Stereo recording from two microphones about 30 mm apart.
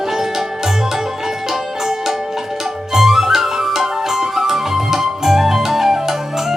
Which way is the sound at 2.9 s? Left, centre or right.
Centre.